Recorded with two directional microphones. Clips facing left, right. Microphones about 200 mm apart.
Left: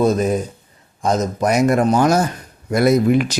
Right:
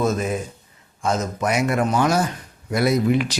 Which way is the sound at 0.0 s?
35° left (ahead or behind).